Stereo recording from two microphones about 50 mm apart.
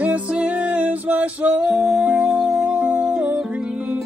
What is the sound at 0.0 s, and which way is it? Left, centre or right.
Music, right.